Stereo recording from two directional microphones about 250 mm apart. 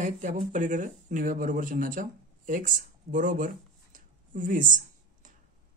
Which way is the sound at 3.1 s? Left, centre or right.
Right.